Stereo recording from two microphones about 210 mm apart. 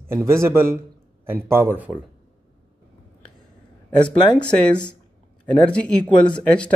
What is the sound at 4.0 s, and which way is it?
Speech, 20° left (ahead or behind).